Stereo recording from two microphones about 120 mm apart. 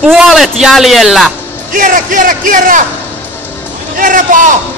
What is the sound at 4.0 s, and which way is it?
Speech, 90° right.